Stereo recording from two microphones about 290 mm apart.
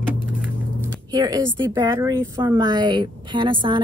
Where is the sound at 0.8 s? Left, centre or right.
Centre.